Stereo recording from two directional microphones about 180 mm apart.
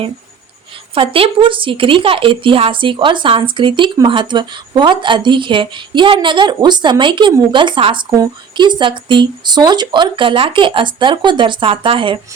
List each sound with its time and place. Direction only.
0.9 s speech: 30° right (ahead or behind)